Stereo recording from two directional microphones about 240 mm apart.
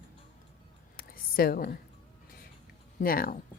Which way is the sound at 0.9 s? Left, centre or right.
Left.